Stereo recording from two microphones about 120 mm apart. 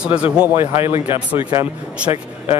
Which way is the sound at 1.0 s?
50° left (ahead or behind).